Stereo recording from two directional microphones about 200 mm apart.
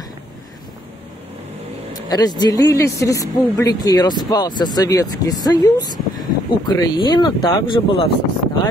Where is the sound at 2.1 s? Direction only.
20° left (ahead or behind).